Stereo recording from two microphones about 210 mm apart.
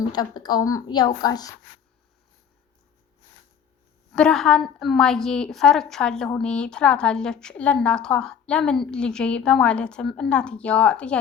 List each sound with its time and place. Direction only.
0.1 s a woman's voice: 20° left (ahead or behind)
4.1 s a woman's voice: 5° left (ahead or behind)